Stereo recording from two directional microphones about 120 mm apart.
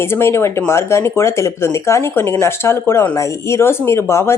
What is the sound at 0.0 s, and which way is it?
Speech, 20° left (ahead or behind).